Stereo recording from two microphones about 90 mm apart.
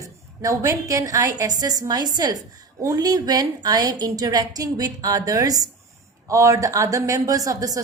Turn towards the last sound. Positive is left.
turn(degrees=-40)  # may be behind; listen again after turning